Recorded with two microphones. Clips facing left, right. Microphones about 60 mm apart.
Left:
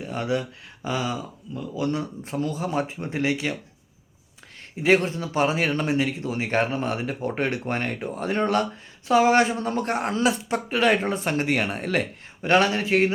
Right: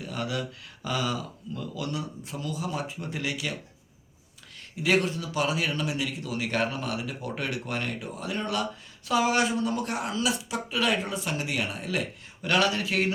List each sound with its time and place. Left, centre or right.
0.0 s speech: left
1.9 s speech: left
4.8 s speech: left
12.4 s speech: left